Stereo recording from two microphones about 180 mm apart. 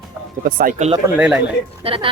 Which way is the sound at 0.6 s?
45° right (ahead or behind).